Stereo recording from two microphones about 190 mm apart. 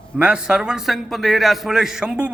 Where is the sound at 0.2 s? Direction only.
5° right (ahead or behind).